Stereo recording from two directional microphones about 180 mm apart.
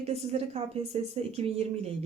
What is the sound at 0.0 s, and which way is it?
A woman's voice, 35° right (ahead or behind).